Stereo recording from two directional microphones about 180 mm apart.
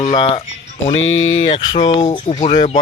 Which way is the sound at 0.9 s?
90° left.